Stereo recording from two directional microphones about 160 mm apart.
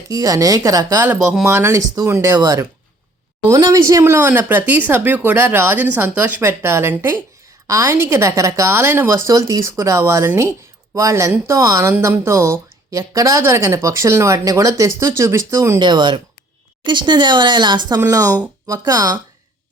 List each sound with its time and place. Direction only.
0.1 s a woman's voice: 20° right (ahead or behind)
15.8 s speech: 30° right (ahead or behind)